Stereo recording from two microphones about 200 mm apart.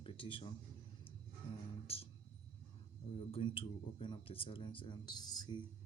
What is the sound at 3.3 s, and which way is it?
Speech, 25° left (ahead or behind).